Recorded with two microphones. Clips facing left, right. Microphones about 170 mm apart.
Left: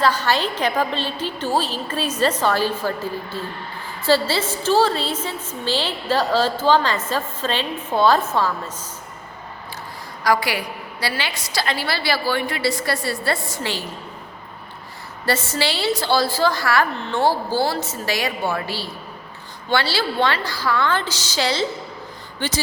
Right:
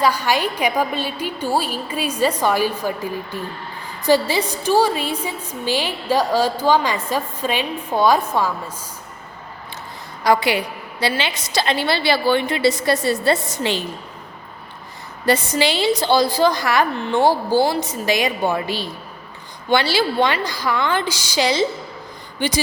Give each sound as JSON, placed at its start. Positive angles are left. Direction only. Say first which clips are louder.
{"t": 0.0, "sound": "a woman's voice", "louder": "right 1 dB", "side_deg": -10}
{"t": 10.2, "sound": "a woman's voice", "louder": "right 3 dB", "side_deg": -20}
{"t": 15.3, "sound": "a woman's voice", "louder": "right 4 dB", "side_deg": -15}